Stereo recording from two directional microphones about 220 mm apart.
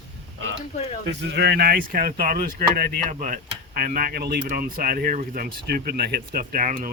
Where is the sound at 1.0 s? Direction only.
50° right (ahead or behind).